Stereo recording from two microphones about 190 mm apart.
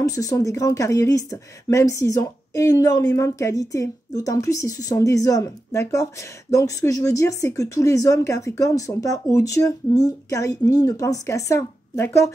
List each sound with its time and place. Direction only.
0.0 s speech: 20° left (ahead or behind)